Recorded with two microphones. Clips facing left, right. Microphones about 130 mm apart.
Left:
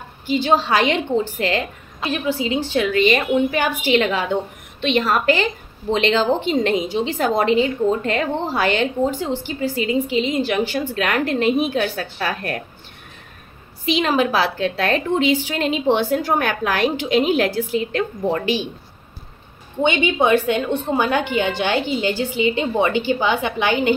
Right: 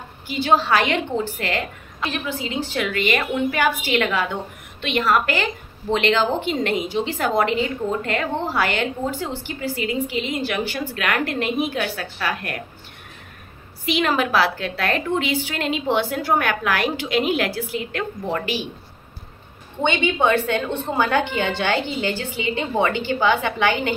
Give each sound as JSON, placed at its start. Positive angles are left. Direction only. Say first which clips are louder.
{"t": 0.3, "sound": "a woman's voice", "louder": "left 1 dB", "side_deg": 20}
{"t": 2.8, "sound": "a woman's voice", "louder": "left 5 dB", "side_deg": 25}
{"t": 13.8, "sound": "a woman's voice", "louder": "left 2 dB", "side_deg": 20}
{"t": 19.8, "sound": "a woman's voice", "louder": "left 2 dB", "side_deg": 15}